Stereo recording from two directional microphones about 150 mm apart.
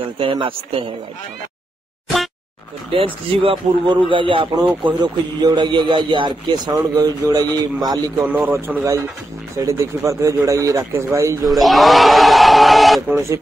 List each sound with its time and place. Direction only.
0.2 s speech: 35° right (ahead or behind)
2.9 s speech: 40° right (ahead or behind)
8.3 s speech: 10° right (ahead or behind)
11.4 s speech: centre (ahead or behind)